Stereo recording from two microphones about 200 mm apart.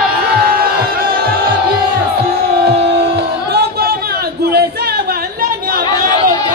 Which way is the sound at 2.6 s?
55° right (ahead or behind).